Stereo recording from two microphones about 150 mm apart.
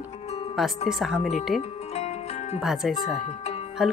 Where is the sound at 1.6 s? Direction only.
45° left (ahead or behind).